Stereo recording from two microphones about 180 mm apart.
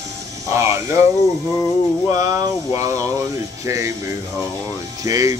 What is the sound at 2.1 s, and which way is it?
Speech, 20° right (ahead or behind).